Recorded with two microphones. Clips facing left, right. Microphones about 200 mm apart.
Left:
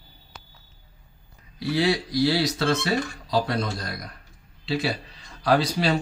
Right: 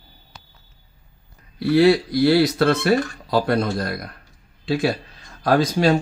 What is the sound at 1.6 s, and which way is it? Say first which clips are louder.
Speech: right 8 dB; 60° right (ahead or behind).